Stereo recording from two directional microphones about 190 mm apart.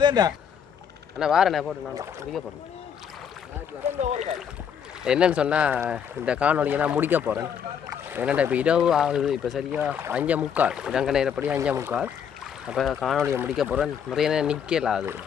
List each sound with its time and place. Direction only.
0.0 s speech: 20° right (ahead or behind)
1.2 s speech: 5° right (ahead or behind)
4.0 s speech: 35° right (ahead or behind)
5.0 s speech: 5° right (ahead or behind)
13.2 s speech: 15° right (ahead or behind)
13.6 s speech: centre (ahead or behind)